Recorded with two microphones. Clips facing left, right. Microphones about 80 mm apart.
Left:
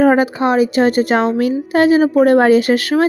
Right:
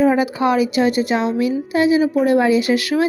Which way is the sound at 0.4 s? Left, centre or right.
Left.